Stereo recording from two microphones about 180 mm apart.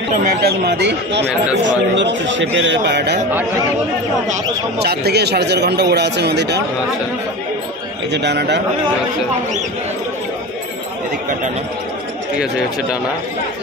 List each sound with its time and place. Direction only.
0.1 s speech: 55° right (ahead or behind); by 1.2 s 70° right (ahead or behind)
1.6 s a man's voice: 85° right; by 3.2 s 65° right (ahead or behind)
4.8 s speech: 65° right (ahead or behind)
8.1 s speech: 70° right (ahead or behind)